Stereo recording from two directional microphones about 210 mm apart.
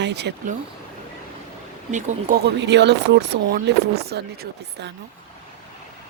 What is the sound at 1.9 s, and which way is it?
Speech, 35° right (ahead or behind).